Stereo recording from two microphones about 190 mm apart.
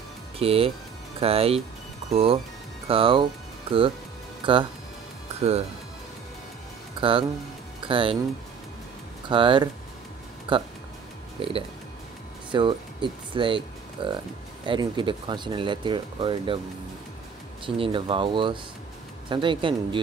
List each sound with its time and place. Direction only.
0.4 s speech: 30° right (ahead or behind)
4.4 s speech: 25° right (ahead or behind)
7.0 s speech: 30° right (ahead or behind)
9.3 s speech: 25° right (ahead or behind)
17.6 s speech: 30° right (ahead or behind)